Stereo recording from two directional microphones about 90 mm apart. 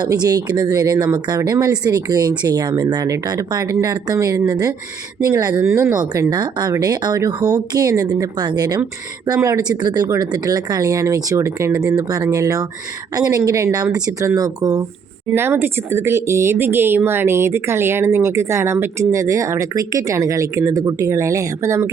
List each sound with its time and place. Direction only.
0.0 s speech: 45° right (ahead or behind)
5.6 s speech: 30° right (ahead or behind); by 8.8 s 50° right (ahead or behind)
9.2 s speech: 40° right (ahead or behind)
15.4 s speech: 25° right (ahead or behind)